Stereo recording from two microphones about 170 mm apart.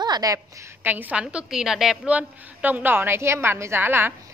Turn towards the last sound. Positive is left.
turn(degrees=-15)  # may be behind; listen again after turning